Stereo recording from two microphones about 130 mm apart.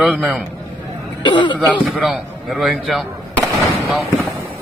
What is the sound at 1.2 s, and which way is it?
Speech, 35° left (ahead or behind).